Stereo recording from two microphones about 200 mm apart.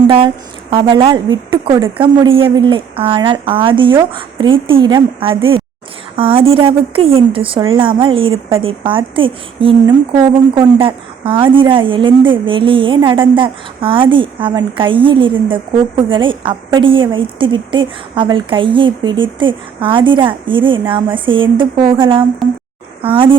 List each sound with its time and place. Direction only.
0.7 s a woman's voice: 25° right (ahead or behind)
22.4 s speech: centre (ahead or behind)
23.0 s a woman's voice: 25° right (ahead or behind)